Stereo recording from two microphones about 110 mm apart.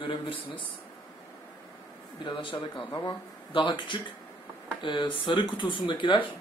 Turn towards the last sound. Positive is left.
turn(degrees=50)  # may be behind; listen again after turning